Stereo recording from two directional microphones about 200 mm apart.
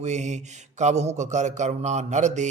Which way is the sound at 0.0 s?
35° right (ahead or behind).